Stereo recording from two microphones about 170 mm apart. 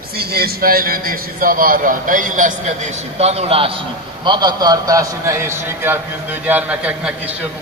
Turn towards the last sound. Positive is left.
turn(degrees=-5)  # may be behind; listen again after turning